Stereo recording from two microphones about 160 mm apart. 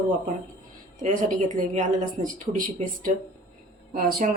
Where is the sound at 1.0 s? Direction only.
50° right (ahead or behind).